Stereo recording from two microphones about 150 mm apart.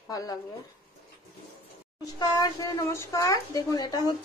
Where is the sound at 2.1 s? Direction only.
25° left (ahead or behind).